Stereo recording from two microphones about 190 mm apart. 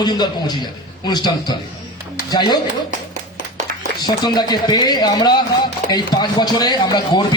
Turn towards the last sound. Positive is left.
turn(degrees=25)  # may be behind; listen again after turning